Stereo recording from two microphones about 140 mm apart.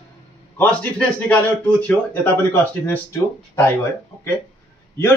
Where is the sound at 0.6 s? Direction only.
10° left (ahead or behind).